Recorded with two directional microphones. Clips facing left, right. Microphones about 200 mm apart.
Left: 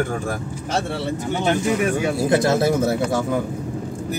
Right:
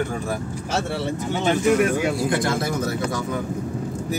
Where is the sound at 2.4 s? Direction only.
25° left (ahead or behind).